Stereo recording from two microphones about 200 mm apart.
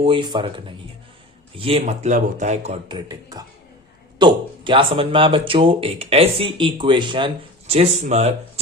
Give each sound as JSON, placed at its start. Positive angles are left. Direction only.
{"t": 0.0, "sound": "speech", "side_deg": -25}
{"t": 2.9, "sound": "speech", "side_deg": -20}